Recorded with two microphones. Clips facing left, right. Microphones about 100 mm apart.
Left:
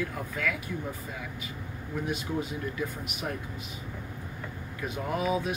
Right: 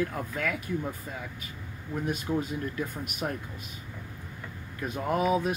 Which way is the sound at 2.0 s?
45° right (ahead or behind).